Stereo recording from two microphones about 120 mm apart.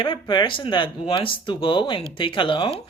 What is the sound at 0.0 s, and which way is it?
A man's voice, 45° left (ahead or behind).